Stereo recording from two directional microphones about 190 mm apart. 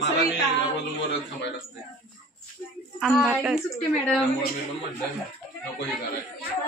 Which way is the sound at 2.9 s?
Centre (ahead or behind).